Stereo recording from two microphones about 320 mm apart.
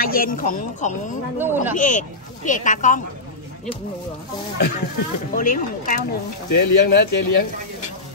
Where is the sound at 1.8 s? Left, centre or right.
Left.